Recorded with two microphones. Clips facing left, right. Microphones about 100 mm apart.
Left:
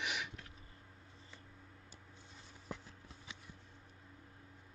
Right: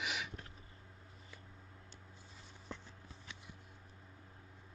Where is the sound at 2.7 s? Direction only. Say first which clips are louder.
Left 2 dB; 10° left (ahead or behind).